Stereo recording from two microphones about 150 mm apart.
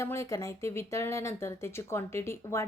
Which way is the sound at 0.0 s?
20° left (ahead or behind).